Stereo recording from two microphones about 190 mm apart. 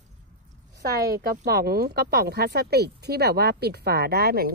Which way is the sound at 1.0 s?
55° right (ahead or behind).